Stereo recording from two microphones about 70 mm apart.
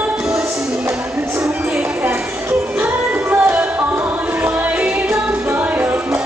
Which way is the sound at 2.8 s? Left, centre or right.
Right.